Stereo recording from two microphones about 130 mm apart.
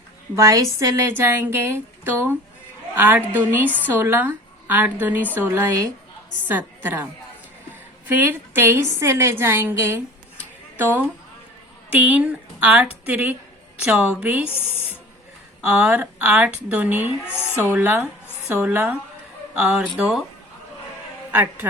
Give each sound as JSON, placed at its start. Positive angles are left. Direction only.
{"t": 0.3, "sound": "a woman's voice", "side_deg": -25}
{"t": 15.6, "sound": "speech", "side_deg": -10}
{"t": 17.2, "sound": "a woman's voice", "side_deg": 20}
{"t": 17.7, "sound": "speech", "side_deg": -15}
{"t": 21.3, "sound": "speech", "side_deg": -15}